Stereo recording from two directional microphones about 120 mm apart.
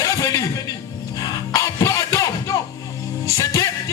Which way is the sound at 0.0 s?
30° left (ahead or behind).